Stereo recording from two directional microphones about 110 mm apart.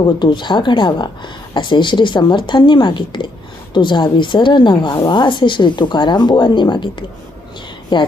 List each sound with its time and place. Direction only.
0.2 s a woman's voice: 45° left (ahead or behind)